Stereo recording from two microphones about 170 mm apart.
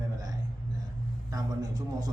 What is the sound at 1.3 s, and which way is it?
Speech, 20° right (ahead or behind).